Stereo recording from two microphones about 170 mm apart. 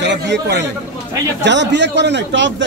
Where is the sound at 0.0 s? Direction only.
90° right.